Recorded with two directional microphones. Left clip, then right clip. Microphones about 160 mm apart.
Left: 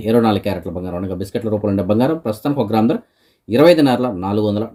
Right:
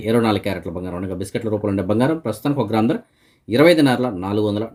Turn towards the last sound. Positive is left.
turn(degrees=-5)  # may be behind; listen again after turning